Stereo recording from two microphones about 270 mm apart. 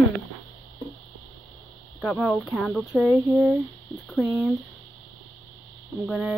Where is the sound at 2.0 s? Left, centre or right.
Centre.